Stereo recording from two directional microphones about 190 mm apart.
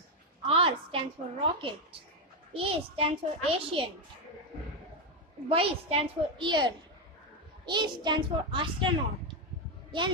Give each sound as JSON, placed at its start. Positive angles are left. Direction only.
{"t": 0.5, "sound": "a child's voice", "side_deg": -30}
{"t": 5.5, "sound": "a child's voice", "side_deg": -30}
{"t": 9.8, "sound": "a sound", "side_deg": -25}